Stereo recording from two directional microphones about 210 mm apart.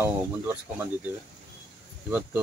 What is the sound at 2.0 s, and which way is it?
Speech, 5° right (ahead or behind).